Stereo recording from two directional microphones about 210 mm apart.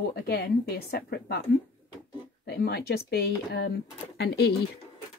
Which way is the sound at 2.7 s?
50° left (ahead or behind).